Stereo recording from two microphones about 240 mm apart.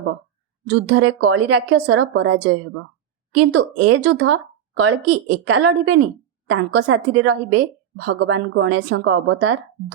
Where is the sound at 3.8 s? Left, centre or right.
Right.